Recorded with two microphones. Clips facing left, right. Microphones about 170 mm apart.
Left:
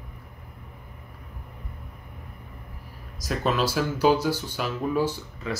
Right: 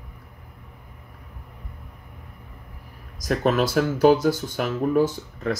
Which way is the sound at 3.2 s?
50° right (ahead or behind).